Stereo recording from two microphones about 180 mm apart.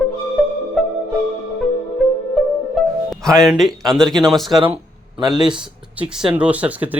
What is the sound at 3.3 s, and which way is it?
Speech, centre (ahead or behind).